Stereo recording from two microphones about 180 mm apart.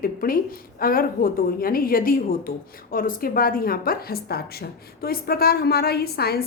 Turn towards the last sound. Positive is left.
turn(degrees=60)  # may be behind; listen again after turning